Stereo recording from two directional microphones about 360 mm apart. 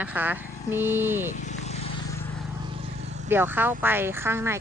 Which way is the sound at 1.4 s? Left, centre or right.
Centre.